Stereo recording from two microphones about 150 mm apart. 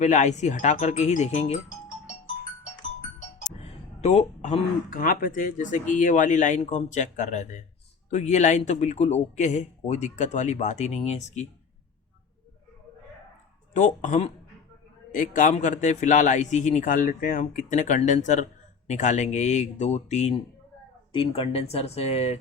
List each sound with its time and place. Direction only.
0.0 s speech: 55° left (ahead or behind)
3.3 s a sound: 45° left (ahead or behind)
4.9 s a man's voice: 70° left (ahead or behind); by 11.4 s 50° left (ahead or behind)
13.7 s a man's voice: 55° left (ahead or behind)
21.1 s speech: 40° left (ahead or behind)